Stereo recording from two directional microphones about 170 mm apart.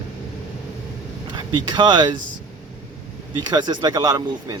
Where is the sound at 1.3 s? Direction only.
25° right (ahead or behind).